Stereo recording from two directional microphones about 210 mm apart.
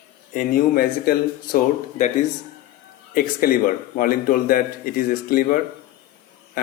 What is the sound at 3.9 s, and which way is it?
Speech, 40° left (ahead or behind).